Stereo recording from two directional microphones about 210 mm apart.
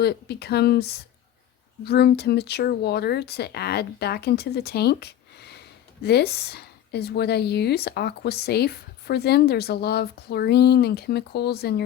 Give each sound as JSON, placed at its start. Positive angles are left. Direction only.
{"t": 0.0, "sound": "a woman's voice", "side_deg": 50}